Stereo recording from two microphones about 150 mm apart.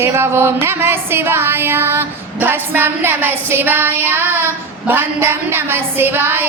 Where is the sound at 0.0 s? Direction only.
15° right (ahead or behind).